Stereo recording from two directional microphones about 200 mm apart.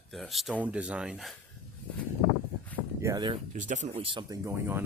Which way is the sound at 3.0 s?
20° right (ahead or behind).